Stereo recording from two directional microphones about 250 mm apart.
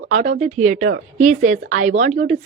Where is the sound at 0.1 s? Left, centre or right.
Right.